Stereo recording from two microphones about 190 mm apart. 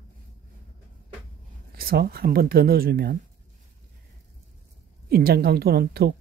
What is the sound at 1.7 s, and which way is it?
Speech, 50° right (ahead or behind).